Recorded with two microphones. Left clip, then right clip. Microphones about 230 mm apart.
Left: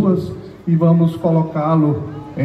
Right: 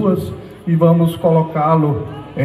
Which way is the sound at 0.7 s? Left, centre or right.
Right.